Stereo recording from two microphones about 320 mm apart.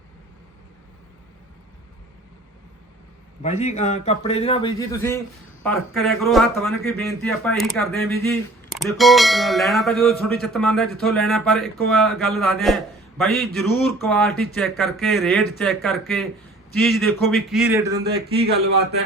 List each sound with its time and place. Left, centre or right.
3.4 s a man's voice: left; by 18.0 s centre
18.0 s a man's voice: right